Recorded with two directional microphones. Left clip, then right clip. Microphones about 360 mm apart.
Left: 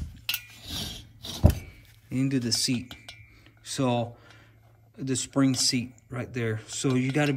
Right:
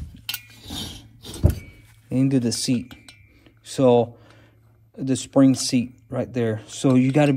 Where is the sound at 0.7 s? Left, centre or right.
Centre.